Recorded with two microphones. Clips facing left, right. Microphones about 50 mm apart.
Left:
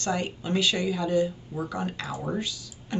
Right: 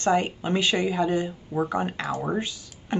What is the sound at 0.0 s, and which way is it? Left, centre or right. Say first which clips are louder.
Speech: right 6 dB; right.